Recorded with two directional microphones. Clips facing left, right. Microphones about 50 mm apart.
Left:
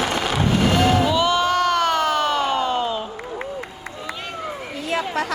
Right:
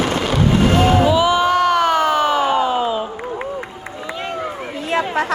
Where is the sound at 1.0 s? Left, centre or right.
Centre.